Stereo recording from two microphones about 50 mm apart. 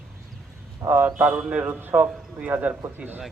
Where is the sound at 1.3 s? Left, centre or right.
Right.